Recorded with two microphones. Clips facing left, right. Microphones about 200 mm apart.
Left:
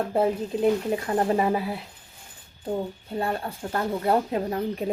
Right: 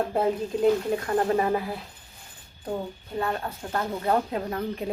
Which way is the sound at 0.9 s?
25° left (ahead or behind).